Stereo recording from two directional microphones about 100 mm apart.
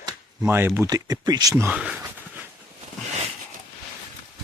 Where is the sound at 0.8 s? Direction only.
40° right (ahead or behind).